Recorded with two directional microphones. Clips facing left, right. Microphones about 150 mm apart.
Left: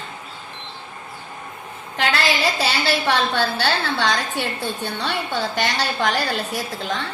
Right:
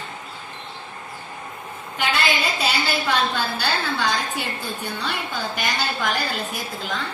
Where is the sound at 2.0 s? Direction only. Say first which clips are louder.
Left 2 dB; 90° left.